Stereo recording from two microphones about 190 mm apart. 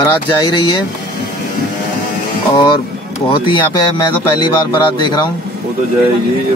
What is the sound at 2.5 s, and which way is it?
Speech, 25° left (ahead or behind).